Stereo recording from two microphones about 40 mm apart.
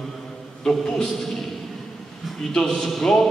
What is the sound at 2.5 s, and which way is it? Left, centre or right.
Speech, centre.